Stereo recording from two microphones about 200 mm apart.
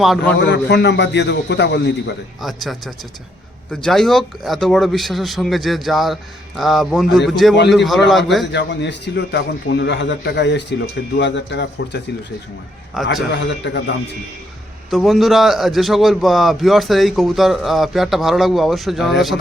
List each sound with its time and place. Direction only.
0.4 s a man's voice: 60° left (ahead or behind)
2.4 s a man's voice: centre (ahead or behind)
8.5 s a man's voice: 60° left (ahead or behind)
12.9 s a man's voice: centre (ahead or behind)
13.3 s a man's voice: 60° left (ahead or behind)
14.8 s a man's voice: centre (ahead or behind)